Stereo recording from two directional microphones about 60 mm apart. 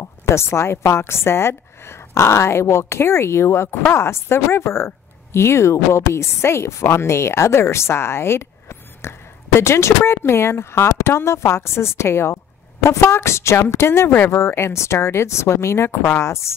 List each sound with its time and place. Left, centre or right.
0.0 s speech: left